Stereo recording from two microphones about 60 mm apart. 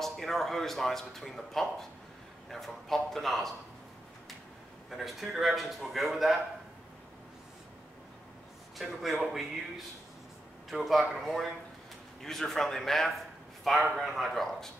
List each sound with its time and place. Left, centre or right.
0.0 s speech: centre
4.8 s speech: centre
8.7 s speech: centre